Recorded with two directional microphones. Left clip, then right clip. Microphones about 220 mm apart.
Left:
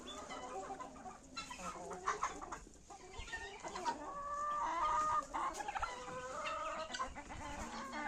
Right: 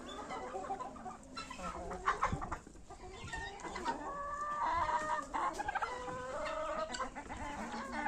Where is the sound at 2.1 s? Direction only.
35° right (ahead or behind).